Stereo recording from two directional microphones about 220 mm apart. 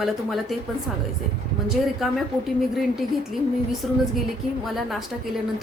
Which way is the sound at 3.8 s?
Centre (ahead or behind).